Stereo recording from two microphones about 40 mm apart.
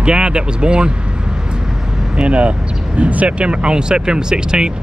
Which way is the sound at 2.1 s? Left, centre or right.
Right.